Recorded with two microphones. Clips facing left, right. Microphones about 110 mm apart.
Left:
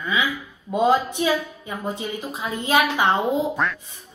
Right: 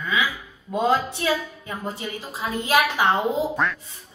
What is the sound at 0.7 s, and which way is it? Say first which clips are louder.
A woman's voice: left 3 dB; 15° left (ahead or behind).